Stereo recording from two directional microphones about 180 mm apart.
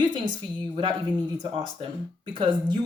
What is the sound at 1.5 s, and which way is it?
Speech, 30° right (ahead or behind).